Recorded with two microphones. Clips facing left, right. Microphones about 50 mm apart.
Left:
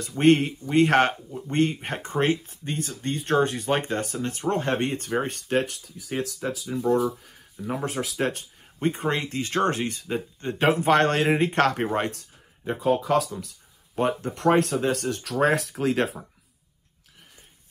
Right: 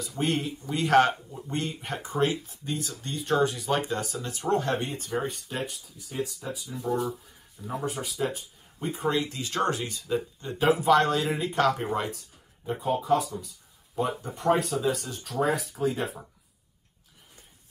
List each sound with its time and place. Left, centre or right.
0.2 s speech: left
6.9 s speech: centre
7.6 s speech: left
8.8 s speech: left
13.9 s speech: left